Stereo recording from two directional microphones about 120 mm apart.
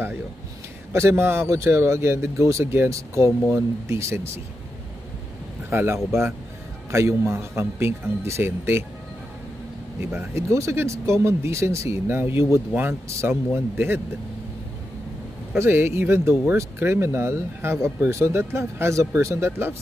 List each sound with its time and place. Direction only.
0.9 s speech: 20° right (ahead or behind)
5.7 s speech: 20° right (ahead or behind)
10.3 s speech: 25° right (ahead or behind)
15.5 s speech: 20° right (ahead or behind)